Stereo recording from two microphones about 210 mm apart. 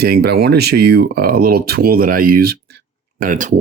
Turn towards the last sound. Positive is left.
turn(degrees=-40)  # may be behind; listen again after turning